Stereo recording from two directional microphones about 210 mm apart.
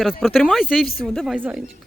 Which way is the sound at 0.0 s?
Centre (ahead or behind).